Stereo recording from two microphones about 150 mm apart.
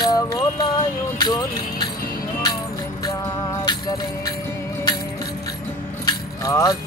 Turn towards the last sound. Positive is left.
turn(degrees=20)  # may be behind; listen again after turning